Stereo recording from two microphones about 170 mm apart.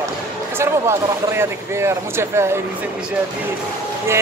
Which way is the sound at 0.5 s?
15° right (ahead or behind).